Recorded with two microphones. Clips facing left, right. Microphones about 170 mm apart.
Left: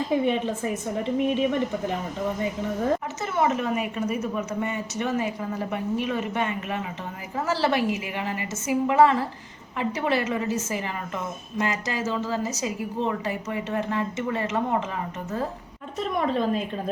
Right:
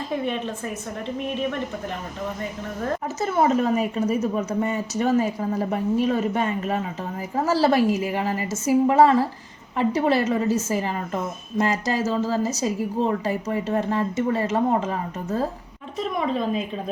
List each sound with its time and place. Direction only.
0.1 s a woman's voice: 15° left (ahead or behind)
3.2 s a woman's voice: 35° right (ahead or behind)
16.0 s a woman's voice: centre (ahead or behind)